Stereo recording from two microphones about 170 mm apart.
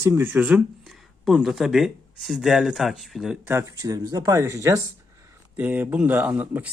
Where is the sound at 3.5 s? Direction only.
20° right (ahead or behind).